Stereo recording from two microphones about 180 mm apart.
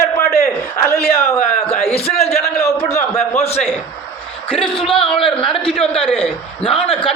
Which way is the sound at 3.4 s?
35° left (ahead or behind).